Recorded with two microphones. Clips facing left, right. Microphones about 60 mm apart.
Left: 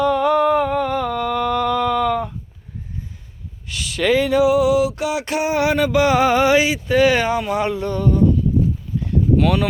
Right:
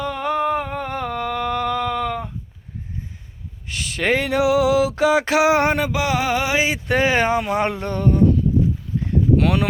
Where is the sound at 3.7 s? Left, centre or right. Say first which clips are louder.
Left 3 dB; right.